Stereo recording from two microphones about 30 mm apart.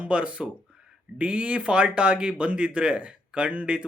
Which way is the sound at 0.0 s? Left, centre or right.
Right.